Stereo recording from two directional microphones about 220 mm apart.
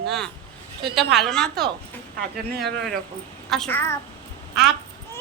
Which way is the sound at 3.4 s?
Centre (ahead or behind).